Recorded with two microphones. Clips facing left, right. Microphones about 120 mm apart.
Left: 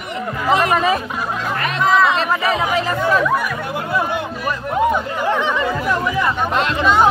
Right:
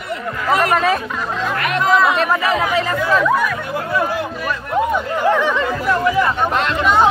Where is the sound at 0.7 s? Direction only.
5° left (ahead or behind).